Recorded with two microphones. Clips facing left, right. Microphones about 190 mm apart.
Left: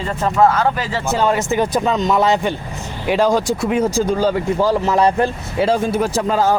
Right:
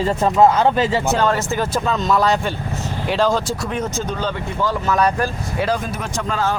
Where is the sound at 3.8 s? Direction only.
30° left (ahead or behind).